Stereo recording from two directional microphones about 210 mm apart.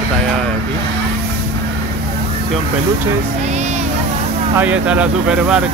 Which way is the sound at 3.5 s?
30° right (ahead or behind).